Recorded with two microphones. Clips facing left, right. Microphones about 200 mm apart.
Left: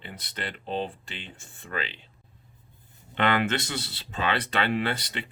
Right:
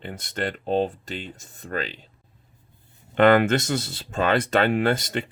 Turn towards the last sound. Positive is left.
turn(degrees=-45)  # may be behind; listen again after turning